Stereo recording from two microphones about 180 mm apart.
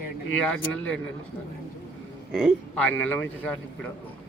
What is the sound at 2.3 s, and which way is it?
Speech, 5° left (ahead or behind).